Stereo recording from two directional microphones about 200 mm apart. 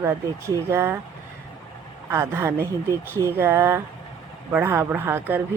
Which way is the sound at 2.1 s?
10° right (ahead or behind).